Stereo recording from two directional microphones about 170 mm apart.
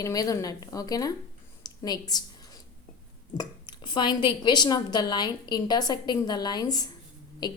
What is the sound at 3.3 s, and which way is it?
A woman's voice, 25° left (ahead or behind).